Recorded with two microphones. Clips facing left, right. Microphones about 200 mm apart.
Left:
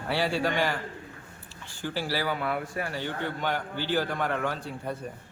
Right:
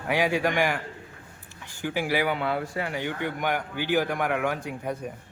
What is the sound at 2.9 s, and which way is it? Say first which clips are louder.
A man's voice: right 2 dB; 15° right (ahead or behind).